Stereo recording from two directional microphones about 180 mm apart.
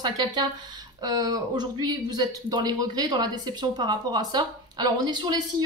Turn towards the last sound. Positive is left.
turn(degrees=-25)  # may be behind; listen again after turning